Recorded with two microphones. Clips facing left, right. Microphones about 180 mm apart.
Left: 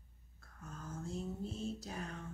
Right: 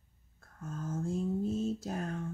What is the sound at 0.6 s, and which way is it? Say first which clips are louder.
A woman's voice: right 9 dB; 45° right (ahead or behind).